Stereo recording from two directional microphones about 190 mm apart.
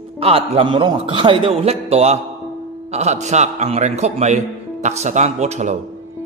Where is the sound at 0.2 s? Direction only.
30° right (ahead or behind).